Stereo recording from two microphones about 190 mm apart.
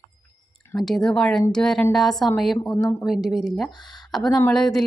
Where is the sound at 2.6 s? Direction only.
15° left (ahead or behind).